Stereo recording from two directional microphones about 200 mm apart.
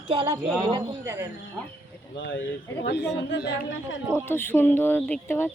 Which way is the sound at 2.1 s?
65° left (ahead or behind).